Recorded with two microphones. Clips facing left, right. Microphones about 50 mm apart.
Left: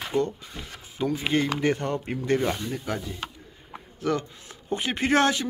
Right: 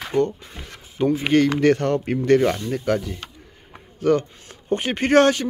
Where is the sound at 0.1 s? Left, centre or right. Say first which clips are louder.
Right 6 dB; right.